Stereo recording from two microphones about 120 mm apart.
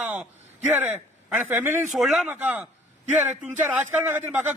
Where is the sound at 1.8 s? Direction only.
Centre (ahead or behind).